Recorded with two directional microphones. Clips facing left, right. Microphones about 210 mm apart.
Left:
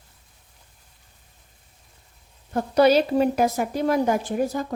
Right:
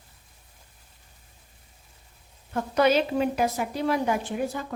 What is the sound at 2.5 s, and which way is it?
A woman's voice, 35° left (ahead or behind).